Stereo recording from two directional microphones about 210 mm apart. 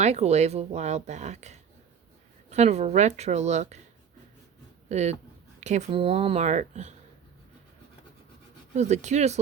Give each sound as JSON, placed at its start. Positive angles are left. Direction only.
{"t": 0.0, "sound": "speech", "side_deg": -30}
{"t": 4.9, "sound": "speech", "side_deg": -35}
{"t": 8.7, "sound": "speech", "side_deg": -35}